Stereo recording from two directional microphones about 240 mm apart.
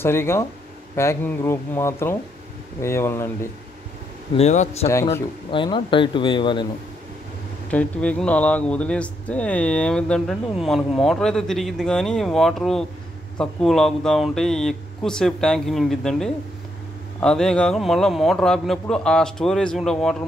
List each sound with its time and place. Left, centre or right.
0.0 s speech: centre
4.4 s speech: left
7.7 s speech: centre